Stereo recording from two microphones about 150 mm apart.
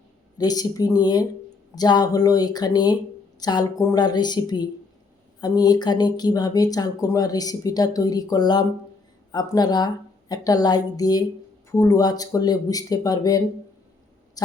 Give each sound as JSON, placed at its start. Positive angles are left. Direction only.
{"t": 0.3, "sound": "speech", "side_deg": 25}